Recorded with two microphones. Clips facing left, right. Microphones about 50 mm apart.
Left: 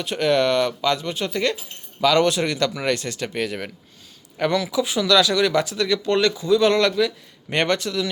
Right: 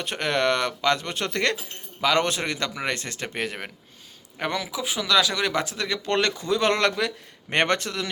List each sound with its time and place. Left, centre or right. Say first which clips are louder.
0.0 s speech: left 4 dB; right
2.0 s a man's voice: left 5 dB; right
4.4 s a man's voice: left 7 dB; centre; by 8.1 s right